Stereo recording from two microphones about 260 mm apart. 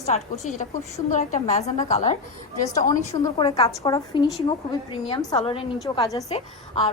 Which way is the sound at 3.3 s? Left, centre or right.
Centre.